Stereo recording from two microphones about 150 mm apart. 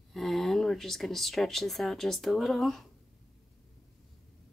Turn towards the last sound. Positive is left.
turn(degrees=0)  # may be behind; listen again after turning